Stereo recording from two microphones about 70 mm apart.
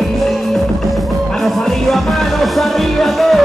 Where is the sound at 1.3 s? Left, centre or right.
Centre.